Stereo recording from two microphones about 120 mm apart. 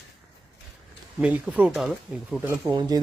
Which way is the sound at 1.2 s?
10° right (ahead or behind).